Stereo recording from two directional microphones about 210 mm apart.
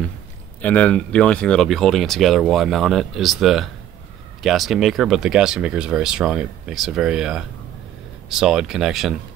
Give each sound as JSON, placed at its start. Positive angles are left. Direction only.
{"t": 0.6, "sound": "speech", "side_deg": 5}